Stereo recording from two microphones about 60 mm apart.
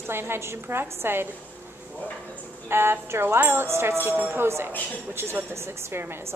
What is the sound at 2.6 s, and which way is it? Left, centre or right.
A woman's voice, right.